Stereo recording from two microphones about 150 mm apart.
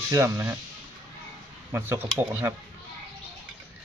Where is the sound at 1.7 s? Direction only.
15° right (ahead or behind).